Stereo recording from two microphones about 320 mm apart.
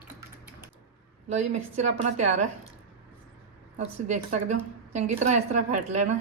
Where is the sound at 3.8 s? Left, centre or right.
Right.